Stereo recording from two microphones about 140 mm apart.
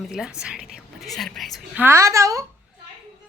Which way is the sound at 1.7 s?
15° right (ahead or behind).